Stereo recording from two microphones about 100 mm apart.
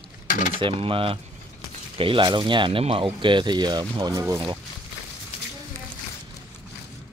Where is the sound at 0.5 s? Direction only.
65° right (ahead or behind); by 4.4 s 40° right (ahead or behind).